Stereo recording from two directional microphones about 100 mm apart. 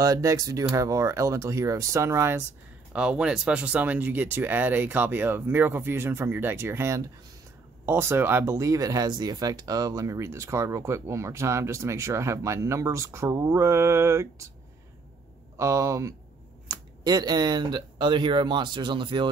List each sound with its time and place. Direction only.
0.0 s speech: 35° right (ahead or behind)
2.9 s speech: 10° right (ahead or behind); by 14.2 s 30° right (ahead or behind)
15.5 s speech: 30° right (ahead or behind)
16.6 s speech: 45° right (ahead or behind)